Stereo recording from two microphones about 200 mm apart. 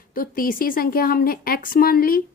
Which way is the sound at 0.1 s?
45° left (ahead or behind).